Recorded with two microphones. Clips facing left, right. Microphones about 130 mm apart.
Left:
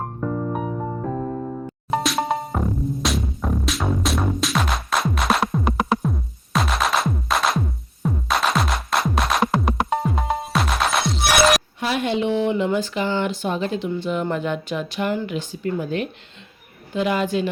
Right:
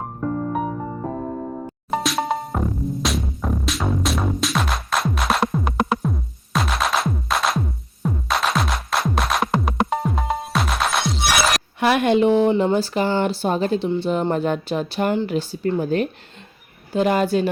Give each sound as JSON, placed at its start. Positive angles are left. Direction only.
{"t": 1.9, "sound": "music", "side_deg": 0}
{"t": 11.8, "sound": "a woman's voice", "side_deg": -60}